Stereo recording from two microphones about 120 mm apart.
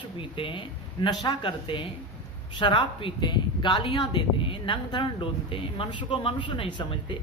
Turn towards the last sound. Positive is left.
turn(degrees=45)  # may be behind; listen again after turning